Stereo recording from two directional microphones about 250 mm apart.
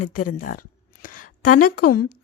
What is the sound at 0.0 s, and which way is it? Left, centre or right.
Speech, left.